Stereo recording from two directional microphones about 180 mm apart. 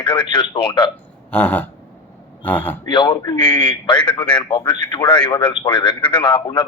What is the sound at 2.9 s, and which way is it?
A man's voice, 25° left (ahead or behind).